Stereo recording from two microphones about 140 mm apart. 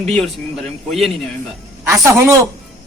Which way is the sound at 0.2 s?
5° left (ahead or behind).